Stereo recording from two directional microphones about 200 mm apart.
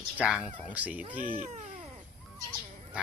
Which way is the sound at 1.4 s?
40° right (ahead or behind).